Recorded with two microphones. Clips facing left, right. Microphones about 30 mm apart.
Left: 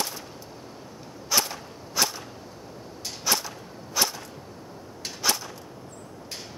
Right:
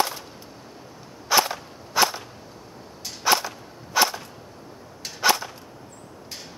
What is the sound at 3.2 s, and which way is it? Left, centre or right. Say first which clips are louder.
Whip: right 6 dB; right.